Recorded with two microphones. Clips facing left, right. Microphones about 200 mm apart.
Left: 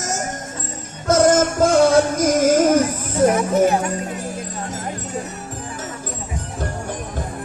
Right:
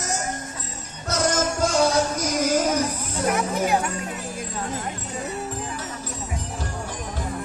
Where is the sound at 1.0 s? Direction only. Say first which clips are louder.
Left 9 dB; 50° left (ahead or behind).